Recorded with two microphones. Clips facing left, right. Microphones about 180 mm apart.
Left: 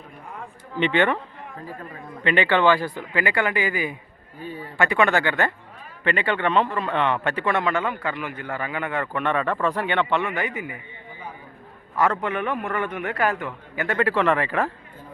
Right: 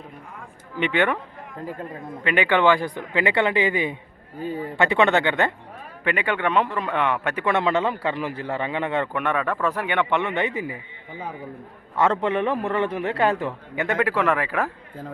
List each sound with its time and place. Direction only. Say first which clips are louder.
0.8 s speech: left 1 dB; 10° right (ahead or behind)
2.2 s a man's voice: even; 10° right (ahead or behind); by 9.0 s 25° right (ahead or behind)
9.1 s speech: left 1 dB; 10° right (ahead or behind); by 10.8 s 30° right (ahead or behind)
11.9 s a man's voice: right 2 dB; 25° right (ahead or behind)
14.0 s speech: left 2 dB; 10° right (ahead or behind)